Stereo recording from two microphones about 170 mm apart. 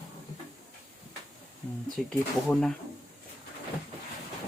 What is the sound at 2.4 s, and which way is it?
Speech, 10° left (ahead or behind).